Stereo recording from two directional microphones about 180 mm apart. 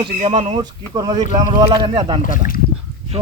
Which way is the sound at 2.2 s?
50° left (ahead or behind).